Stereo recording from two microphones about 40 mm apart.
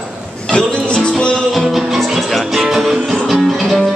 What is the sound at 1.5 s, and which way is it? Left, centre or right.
Music, centre.